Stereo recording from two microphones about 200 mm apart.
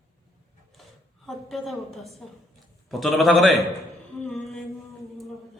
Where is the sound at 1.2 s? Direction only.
Centre (ahead or behind).